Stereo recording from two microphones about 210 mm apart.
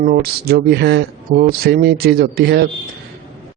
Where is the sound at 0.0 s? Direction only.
50° right (ahead or behind).